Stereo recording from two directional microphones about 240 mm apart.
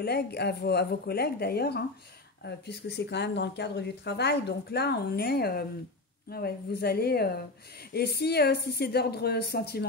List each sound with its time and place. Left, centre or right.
0.0 s speech: left